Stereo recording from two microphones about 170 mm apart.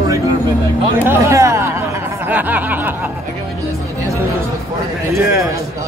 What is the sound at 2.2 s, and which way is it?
Music, 10° right (ahead or behind).